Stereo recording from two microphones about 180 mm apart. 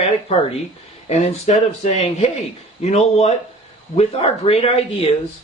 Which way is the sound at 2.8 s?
40° left (ahead or behind).